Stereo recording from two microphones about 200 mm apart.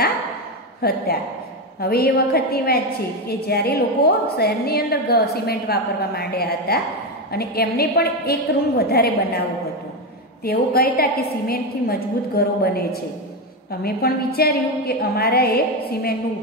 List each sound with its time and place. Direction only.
0.8 s a woman's voice: 50° left (ahead or behind)
10.4 s a woman's voice: 50° left (ahead or behind)